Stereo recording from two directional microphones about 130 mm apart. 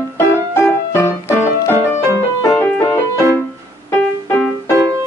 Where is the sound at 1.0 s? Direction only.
20° left (ahead or behind).